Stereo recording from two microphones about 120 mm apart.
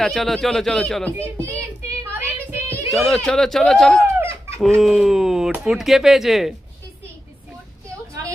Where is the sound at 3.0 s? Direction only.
5° left (ahead or behind).